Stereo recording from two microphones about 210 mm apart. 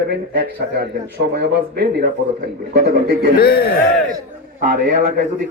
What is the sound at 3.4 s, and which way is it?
Speech, 45° left (ahead or behind).